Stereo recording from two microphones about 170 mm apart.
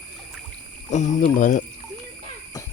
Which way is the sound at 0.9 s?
45° left (ahead or behind).